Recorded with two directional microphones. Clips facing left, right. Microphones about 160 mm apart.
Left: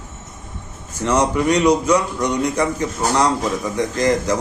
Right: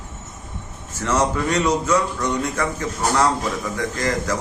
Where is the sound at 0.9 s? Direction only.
15° left (ahead or behind).